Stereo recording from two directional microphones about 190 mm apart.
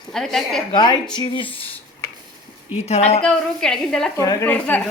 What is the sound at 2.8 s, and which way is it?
Speech, 35° left (ahead or behind).